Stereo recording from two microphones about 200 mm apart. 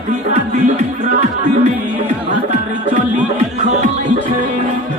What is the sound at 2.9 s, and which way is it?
Music, 40° right (ahead or behind).